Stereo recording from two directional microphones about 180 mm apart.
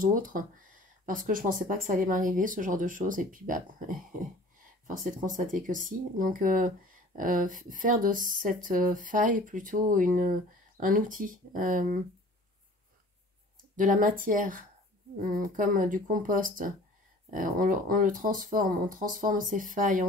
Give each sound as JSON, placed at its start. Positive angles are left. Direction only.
{"t": 0.0, "sound": "speech", "side_deg": -50}
{"t": 13.7, "sound": "speech", "side_deg": -50}